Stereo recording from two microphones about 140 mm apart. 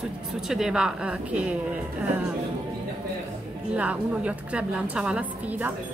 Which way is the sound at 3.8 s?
10° right (ahead or behind).